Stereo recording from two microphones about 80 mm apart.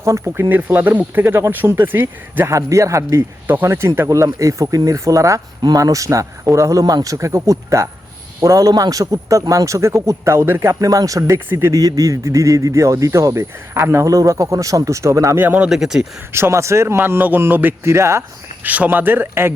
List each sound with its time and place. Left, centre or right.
0.0 s speech: right
2.5 s speech: right
3.4 s speech: right
8.7 s speech: right
10.8 s speech: right
15.4 s speech: right
15.7 s speech: centre
16.3 s speech: right
17.0 s speech: right
18.6 s speech: centre